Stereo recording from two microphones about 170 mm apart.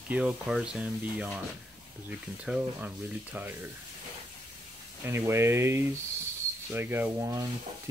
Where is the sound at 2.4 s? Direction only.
5° right (ahead or behind).